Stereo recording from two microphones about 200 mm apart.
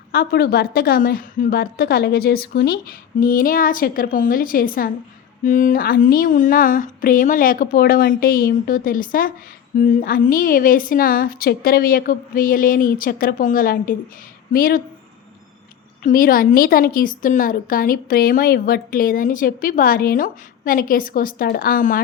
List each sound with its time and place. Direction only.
0.1 s speech: 50° left (ahead or behind)
16.0 s speech: 45° left (ahead or behind)